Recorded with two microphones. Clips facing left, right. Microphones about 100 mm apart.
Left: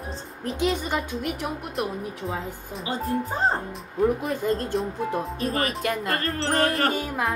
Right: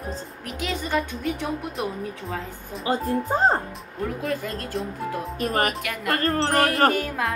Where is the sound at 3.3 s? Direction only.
35° right (ahead or behind).